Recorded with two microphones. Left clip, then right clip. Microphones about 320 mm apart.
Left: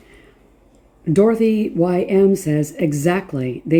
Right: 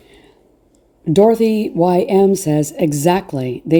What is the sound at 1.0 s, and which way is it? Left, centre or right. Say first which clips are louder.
Speech: right 3 dB; centre.